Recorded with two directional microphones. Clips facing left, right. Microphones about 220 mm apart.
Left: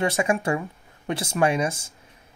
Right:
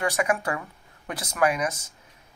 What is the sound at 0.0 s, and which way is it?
Speech, 25° left (ahead or behind).